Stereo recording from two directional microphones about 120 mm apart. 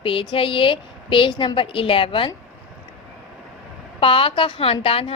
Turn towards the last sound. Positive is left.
turn(degrees=50)  # may be behind; listen again after turning